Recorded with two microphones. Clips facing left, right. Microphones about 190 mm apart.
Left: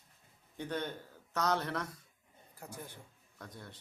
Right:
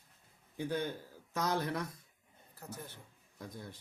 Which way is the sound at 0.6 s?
10° right (ahead or behind).